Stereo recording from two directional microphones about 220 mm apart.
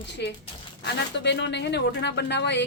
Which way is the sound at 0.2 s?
50° left (ahead or behind).